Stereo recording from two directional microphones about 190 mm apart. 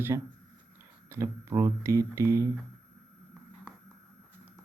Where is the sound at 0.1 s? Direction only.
20° right (ahead or behind).